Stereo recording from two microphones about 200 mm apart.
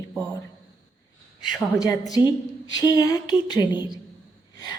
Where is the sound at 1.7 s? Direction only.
15° left (ahead or behind).